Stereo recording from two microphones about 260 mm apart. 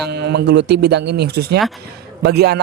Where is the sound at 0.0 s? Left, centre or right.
Right.